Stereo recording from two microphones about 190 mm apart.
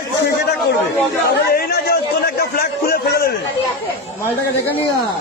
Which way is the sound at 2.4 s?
50° left (ahead or behind).